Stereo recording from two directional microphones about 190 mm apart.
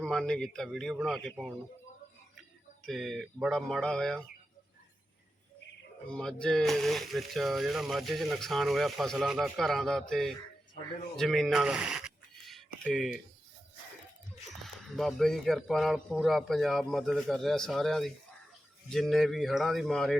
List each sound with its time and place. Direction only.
0.0 s speech: 5° left (ahead or behind)
2.8 s speech: centre (ahead or behind)
6.1 s speech: 5° left (ahead or behind)
11.2 s a sound: centre (ahead or behind)
14.5 s speech: centre (ahead or behind)